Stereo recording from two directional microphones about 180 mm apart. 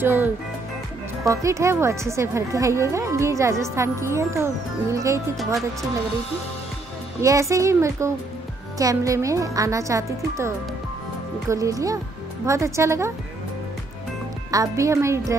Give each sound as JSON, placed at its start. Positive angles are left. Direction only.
{"t": 0.0, "sound": "speech", "side_deg": -10}
{"t": 7.2, "sound": "speech", "side_deg": -15}
{"t": 14.5, "sound": "speech", "side_deg": -20}